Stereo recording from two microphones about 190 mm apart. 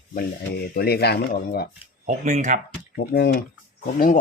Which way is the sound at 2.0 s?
40° right (ahead or behind).